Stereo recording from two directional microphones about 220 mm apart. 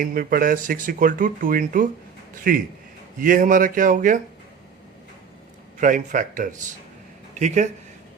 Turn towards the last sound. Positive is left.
turn(degrees=-30)  # may be behind; listen again after turning